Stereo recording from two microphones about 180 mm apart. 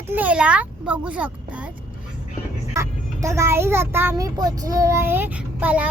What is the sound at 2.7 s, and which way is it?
A child's voice, 15° right (ahead or behind).